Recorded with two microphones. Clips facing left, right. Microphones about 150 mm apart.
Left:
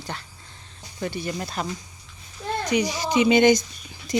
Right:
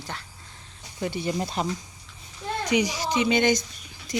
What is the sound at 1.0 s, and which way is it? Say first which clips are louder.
Speech: right 1 dB; 20° right (ahead or behind).